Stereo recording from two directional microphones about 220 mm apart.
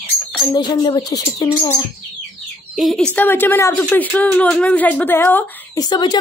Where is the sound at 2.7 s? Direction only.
Centre (ahead or behind).